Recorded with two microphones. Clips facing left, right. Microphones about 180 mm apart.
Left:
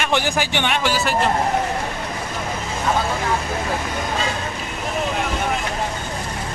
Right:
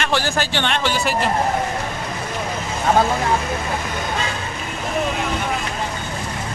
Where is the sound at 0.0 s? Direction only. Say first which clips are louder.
Even; 15° left (ahead or behind).